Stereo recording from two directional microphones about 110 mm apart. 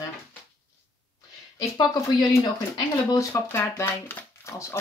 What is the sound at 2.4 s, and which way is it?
Speech, 35° left (ahead or behind).